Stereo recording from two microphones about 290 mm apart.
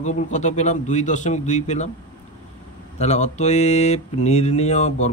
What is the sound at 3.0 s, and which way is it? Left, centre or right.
Speech, left.